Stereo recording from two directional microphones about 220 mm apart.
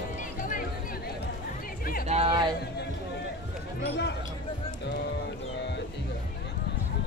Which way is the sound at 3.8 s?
50° left (ahead or behind).